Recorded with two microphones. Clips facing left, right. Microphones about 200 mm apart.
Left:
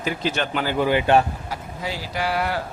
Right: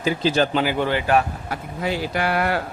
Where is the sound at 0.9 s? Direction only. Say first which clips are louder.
Left 5 dB; 20° left (ahead or behind).